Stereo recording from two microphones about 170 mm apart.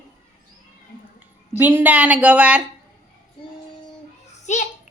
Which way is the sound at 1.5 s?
10° right (ahead or behind).